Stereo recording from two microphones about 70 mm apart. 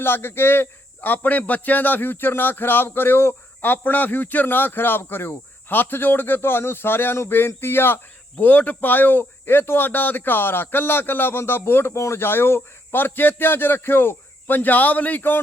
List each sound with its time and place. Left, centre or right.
0.0 s a man's voice: left